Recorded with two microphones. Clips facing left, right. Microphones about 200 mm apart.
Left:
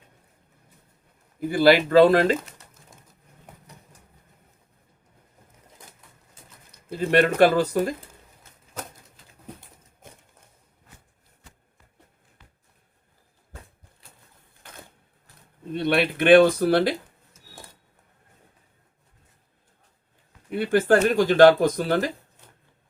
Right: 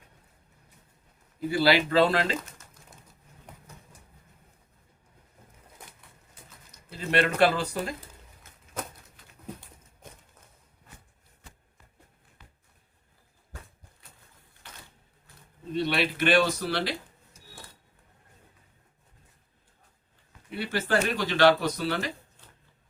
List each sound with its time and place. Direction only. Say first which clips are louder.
1.4 s speech: left 6 dB; 50° left (ahead or behind)
6.7 s speech: left 8 dB; 50° left (ahead or behind)
14.6 s a sound: left 5 dB; 55° left (ahead or behind)
15.7 s speech: left 5 dB; 55° left (ahead or behind)
20.5 s speech: left 9 dB; 50° left (ahead or behind)